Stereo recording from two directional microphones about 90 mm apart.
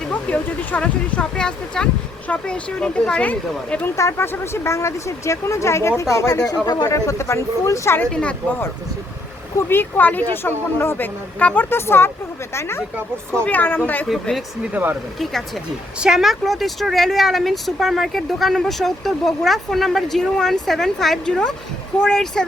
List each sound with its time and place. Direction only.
0.1 s speech: 15° left (ahead or behind)
3.9 s speech: 30° left (ahead or behind); by 6.9 s 50° left (ahead or behind)
6.9 s speech: 35° left (ahead or behind)
8.1 s speech: 15° left (ahead or behind)
9.6 s speech: 25° left (ahead or behind)
14.1 s speech: centre (ahead or behind)
14.7 s speech: 20° right (ahead or behind)
15.2 s speech: 5° left (ahead or behind)